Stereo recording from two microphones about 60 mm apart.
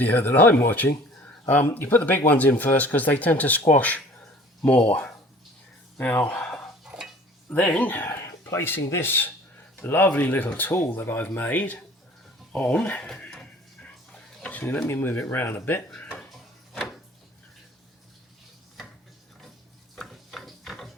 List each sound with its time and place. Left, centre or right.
0.0 s speech: left
7.5 s speech: left
8.2 s a sound: left
8.9 s speech: left
13.3 s music: centre
14.4 s speech: left
20.0 s ratchet: centre